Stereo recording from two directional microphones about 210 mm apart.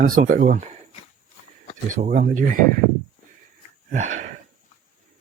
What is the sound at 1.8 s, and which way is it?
Speech, 35° right (ahead or behind).